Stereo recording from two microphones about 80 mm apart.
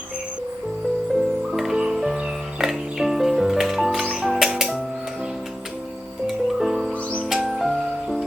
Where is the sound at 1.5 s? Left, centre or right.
Centre.